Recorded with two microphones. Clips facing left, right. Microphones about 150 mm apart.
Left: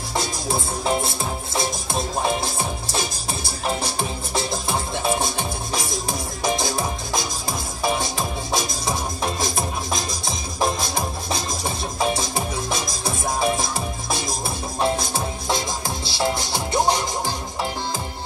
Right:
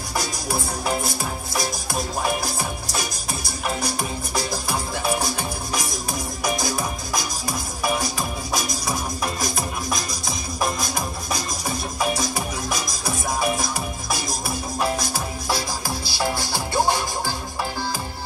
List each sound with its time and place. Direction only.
0.1 s music: 25° left (ahead or behind)